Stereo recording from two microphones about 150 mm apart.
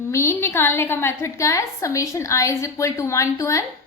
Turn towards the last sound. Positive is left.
turn(degrees=20)  # may be behind; listen again after turning